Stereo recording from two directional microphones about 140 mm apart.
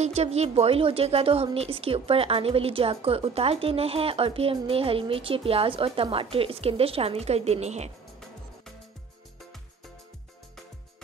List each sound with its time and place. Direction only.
0.0 s a woman's voice: 50° right (ahead or behind)